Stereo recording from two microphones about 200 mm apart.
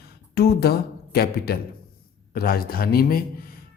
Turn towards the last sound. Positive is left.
turn(degrees=50)  # may be behind; listen again after turning